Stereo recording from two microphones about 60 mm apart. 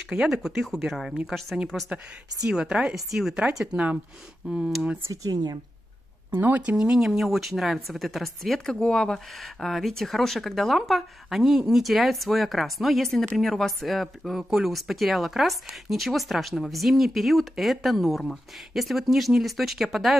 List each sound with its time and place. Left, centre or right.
0.1 s speech: centre
2.4 s speech: centre
4.5 s speech: centre
5.1 s speech: right
6.3 s speech: right
6.8 s speech: centre